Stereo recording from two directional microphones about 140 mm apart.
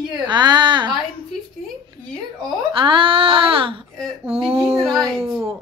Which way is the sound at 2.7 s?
35° right (ahead or behind).